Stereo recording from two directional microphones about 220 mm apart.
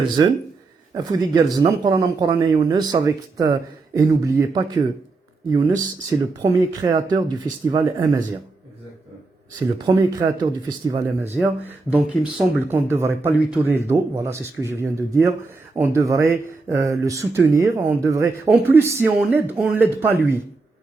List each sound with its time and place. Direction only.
0.9 s speech: 15° right (ahead or behind)
9.8 s speech: 20° right (ahead or behind)